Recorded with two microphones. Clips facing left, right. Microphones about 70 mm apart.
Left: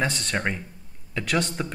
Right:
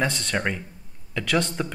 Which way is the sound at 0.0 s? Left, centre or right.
Centre.